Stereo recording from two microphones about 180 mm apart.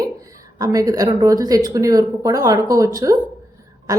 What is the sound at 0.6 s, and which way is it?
A woman's voice, 20° right (ahead or behind).